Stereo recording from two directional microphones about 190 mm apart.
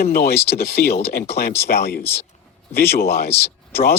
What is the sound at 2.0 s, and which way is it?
Speech, 10° left (ahead or behind).